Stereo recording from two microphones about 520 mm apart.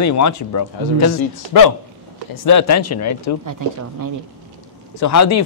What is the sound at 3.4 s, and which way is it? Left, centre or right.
Speech, right.